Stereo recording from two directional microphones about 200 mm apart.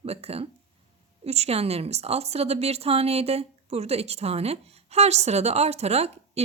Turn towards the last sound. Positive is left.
turn(degrees=-30)  # may be behind; listen again after turning